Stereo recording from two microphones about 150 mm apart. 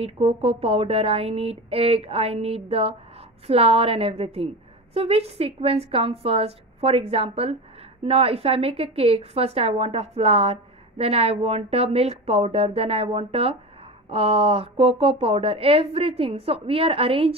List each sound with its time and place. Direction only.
0.0 s a woman's voice: 40° right (ahead or behind)